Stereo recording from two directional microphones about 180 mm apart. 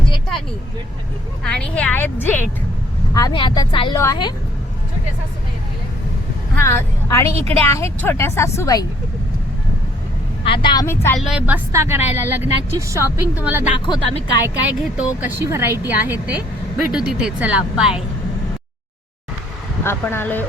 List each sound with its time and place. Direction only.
1.5 s a woman's voice: 5° left (ahead or behind)
3.2 s speech: 25° left (ahead or behind)
6.6 s a woman's voice: 15° left (ahead or behind)
10.4 s speech: 25° left (ahead or behind)
11.2 s speech: 5° right (ahead or behind)
13.7 s speech: 25° left (ahead or behind)
14.4 s speech: 5° right (ahead or behind)
19.8 s a woman's voice: 15° left (ahead or behind)